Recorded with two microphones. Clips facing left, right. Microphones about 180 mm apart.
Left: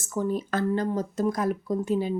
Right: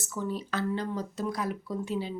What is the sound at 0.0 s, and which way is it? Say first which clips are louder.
Speech: left 6 dB; 50° left (ahead or behind).